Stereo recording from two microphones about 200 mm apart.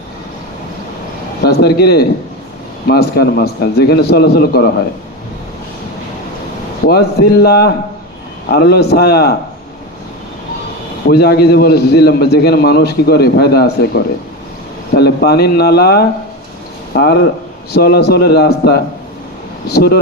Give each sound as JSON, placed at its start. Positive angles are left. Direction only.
{"t": 1.5, "sound": "a man's voice", "side_deg": 55}
{"t": 6.8, "sound": "a man's voice", "side_deg": 55}
{"t": 11.0, "sound": "a man's voice", "side_deg": 50}